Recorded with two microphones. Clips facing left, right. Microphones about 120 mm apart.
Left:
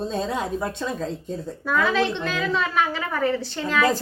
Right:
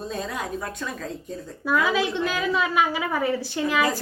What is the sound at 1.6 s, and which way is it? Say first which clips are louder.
A woman's voice: left 1 dB; 10° right (ahead or behind).